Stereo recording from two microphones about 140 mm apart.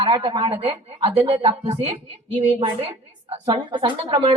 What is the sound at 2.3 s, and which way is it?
A woman's voice, 40° right (ahead or behind).